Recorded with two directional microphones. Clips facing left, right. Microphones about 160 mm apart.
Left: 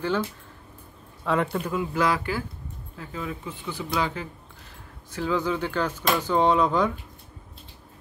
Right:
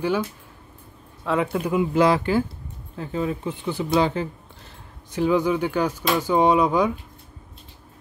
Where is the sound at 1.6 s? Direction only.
20° right (ahead or behind).